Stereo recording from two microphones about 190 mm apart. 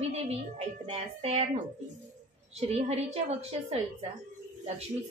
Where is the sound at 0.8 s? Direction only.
35° right (ahead or behind).